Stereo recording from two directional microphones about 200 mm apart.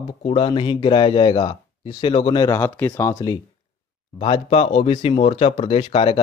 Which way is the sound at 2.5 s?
10° left (ahead or behind).